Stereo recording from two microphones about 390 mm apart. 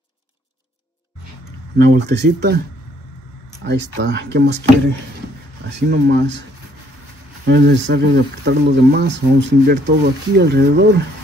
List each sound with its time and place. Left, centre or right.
1.8 s speech: right
3.6 s speech: right
7.4 s speech: right